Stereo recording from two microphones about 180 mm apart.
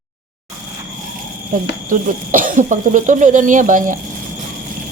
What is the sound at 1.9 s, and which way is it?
Speech, 50° right (ahead or behind).